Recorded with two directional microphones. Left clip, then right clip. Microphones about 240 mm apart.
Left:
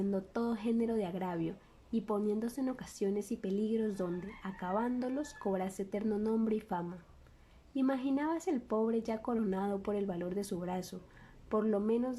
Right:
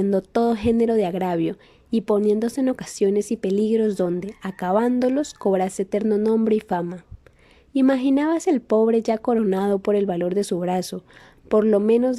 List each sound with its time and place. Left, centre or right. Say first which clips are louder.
0.0 s a woman's voice: right 16 dB; right